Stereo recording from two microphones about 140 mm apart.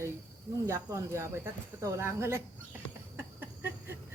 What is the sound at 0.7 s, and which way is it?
Speech, 20° right (ahead or behind).